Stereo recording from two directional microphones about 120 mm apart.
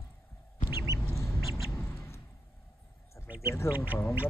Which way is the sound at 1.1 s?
25° left (ahead or behind).